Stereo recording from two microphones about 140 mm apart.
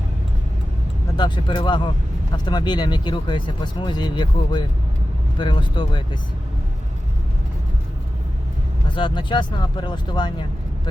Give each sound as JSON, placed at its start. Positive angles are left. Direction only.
{"t": 1.1, "sound": "speech", "side_deg": 30}
{"t": 9.0, "sound": "speech", "side_deg": 35}